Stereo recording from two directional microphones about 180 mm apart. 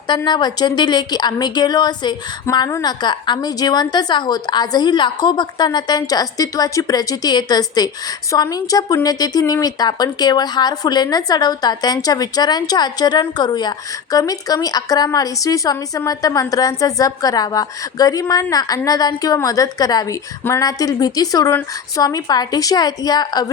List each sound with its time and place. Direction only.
0.3 s a woman's voice: 25° left (ahead or behind)